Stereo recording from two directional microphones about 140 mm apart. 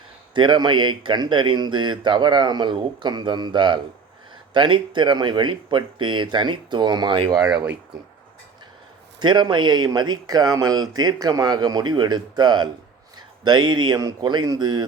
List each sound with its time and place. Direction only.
0.3 s speech: 35° right (ahead or behind); by 7.8 s 20° right (ahead or behind)
9.2 s speech: 35° right (ahead or behind)